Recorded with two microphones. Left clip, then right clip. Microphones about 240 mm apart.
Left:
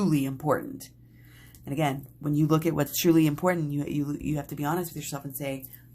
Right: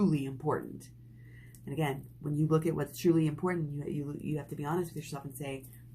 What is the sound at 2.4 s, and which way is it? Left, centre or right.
Speech, left.